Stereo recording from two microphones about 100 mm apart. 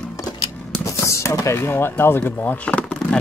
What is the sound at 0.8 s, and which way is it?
Speech, 30° left (ahead or behind).